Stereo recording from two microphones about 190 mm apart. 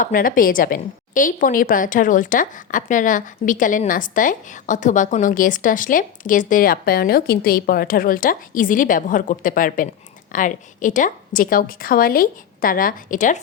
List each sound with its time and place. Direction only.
0.0 s a woman's voice: 45° left (ahead or behind)